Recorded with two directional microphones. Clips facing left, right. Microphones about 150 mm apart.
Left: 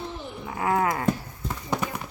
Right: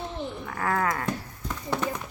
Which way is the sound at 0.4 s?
20° left (ahead or behind).